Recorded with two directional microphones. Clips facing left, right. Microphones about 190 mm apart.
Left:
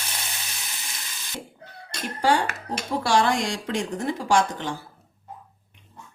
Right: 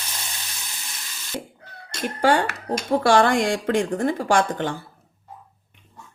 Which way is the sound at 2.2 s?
55° right (ahead or behind).